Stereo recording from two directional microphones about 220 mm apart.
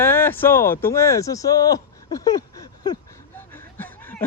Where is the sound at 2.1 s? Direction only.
15° left (ahead or behind).